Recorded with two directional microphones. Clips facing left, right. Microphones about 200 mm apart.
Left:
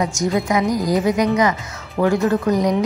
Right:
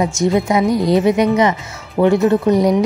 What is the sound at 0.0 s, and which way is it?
Speech, 25° right (ahead or behind).